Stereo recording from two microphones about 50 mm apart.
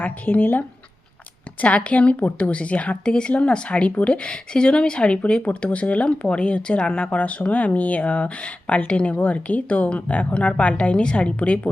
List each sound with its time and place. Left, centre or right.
0.0 s speech: left
1.6 s speech: left
3.0 s speech: centre